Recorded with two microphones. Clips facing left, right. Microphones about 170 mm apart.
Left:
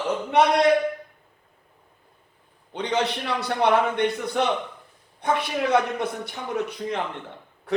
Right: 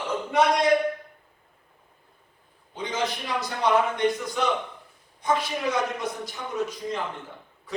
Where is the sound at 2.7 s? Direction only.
70° left (ahead or behind).